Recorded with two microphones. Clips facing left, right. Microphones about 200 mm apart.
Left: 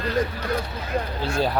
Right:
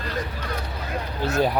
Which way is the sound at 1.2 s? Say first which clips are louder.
Right 4 dB; 20° right (ahead or behind).